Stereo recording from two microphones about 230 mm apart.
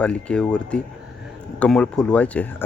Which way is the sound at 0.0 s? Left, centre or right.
Centre.